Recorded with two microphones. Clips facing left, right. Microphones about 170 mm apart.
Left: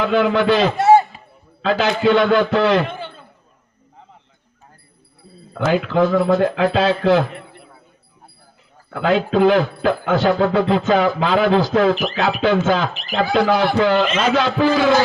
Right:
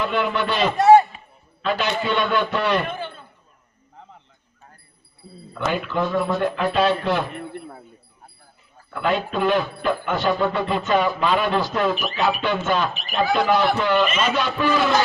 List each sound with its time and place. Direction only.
0.0 s speech: 90° left
0.8 s a sound: 25° left (ahead or behind)
1.6 s speech: 90° left
5.5 s speech: 90° left
8.9 s speech: 90° left